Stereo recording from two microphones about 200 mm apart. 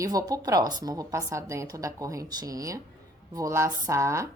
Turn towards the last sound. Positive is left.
turn(degrees=-15)  # may be behind; listen again after turning